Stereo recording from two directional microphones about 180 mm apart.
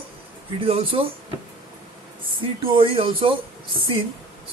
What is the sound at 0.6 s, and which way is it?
Speech, 30° right (ahead or behind).